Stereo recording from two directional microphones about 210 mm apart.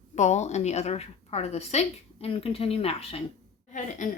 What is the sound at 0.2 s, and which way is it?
A woman's voice, 35° left (ahead or behind).